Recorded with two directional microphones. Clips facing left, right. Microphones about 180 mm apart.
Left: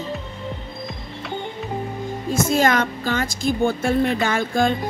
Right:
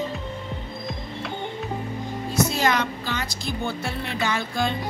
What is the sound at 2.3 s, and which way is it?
Music, 50° left (ahead or behind).